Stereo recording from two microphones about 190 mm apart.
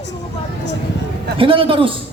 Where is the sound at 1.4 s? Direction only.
30° right (ahead or behind).